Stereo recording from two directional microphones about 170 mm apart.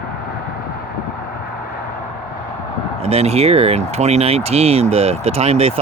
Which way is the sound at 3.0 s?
35° right (ahead or behind).